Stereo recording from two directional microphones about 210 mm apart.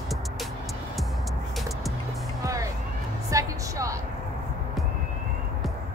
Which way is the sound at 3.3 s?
15° right (ahead or behind).